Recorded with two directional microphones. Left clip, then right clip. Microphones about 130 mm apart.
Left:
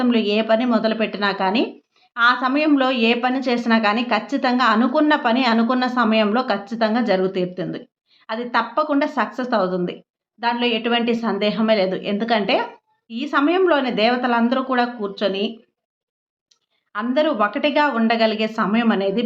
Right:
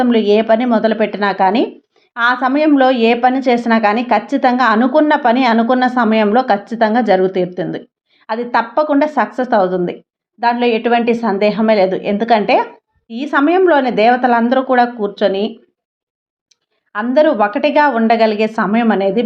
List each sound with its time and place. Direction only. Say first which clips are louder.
0.0 s a woman's voice: right 7 dB; 35° right (ahead or behind)
16.9 s a woman's voice: right 8 dB; 40° right (ahead or behind)